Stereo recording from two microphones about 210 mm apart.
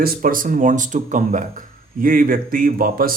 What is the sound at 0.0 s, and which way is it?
Speech, 45° right (ahead or behind).